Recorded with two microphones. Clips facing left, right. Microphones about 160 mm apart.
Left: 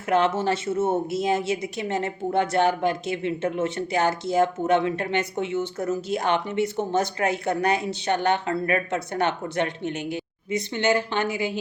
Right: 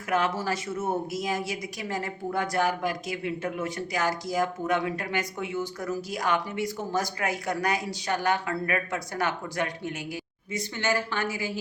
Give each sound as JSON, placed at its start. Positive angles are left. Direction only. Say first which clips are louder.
{"t": 0.1, "sound": "a woman's voice", "louder": "left 5 dB", "side_deg": 25}